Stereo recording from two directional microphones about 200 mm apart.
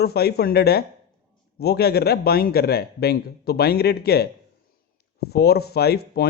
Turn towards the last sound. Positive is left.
turn(degrees=50)  # may be behind; listen again after turning